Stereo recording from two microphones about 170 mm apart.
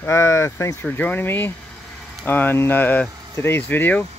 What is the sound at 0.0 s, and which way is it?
Speech, 15° left (ahead or behind).